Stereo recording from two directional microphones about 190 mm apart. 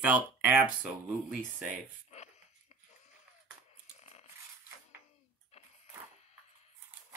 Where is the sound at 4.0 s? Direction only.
35° left (ahead or behind).